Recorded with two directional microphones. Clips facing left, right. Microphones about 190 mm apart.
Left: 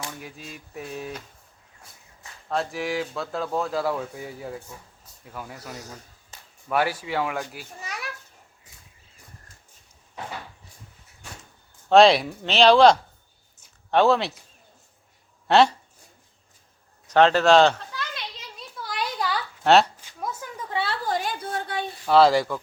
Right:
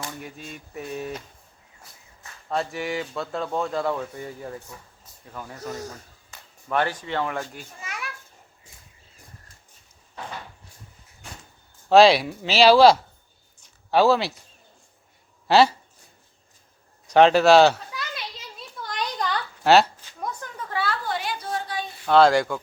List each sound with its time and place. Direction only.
0.2 s speech: centre (ahead or behind)
2.5 s speech: centre (ahead or behind)
7.8 s children playing: 35° left (ahead or behind)
11.9 s speech: centre (ahead or behind)
15.4 s speech: 5° right (ahead or behind)
17.1 s children playing: 10° right (ahead or behind); by 20.7 s 5° left (ahead or behind)
20.7 s a sound: 25° left (ahead or behind)
21.1 s a sound: 45° left (ahead or behind)
22.0 s speech: centre (ahead or behind)